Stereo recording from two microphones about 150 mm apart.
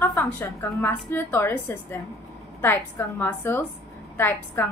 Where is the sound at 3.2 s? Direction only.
15° left (ahead or behind).